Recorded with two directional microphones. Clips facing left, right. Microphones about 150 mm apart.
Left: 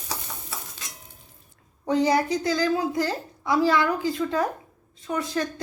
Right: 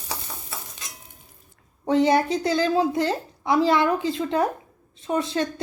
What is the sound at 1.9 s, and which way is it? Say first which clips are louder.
A woman's voice: right 2 dB; 25° right (ahead or behind).